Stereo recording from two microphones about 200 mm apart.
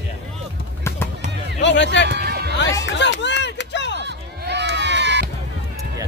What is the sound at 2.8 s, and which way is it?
Music, 60° left (ahead or behind).